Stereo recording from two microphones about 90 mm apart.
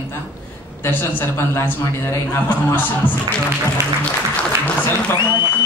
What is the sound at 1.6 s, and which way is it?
A man's voice, 25° left (ahead or behind).